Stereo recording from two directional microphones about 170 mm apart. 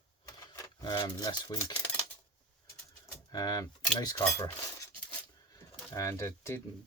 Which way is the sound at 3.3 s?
20° left (ahead or behind).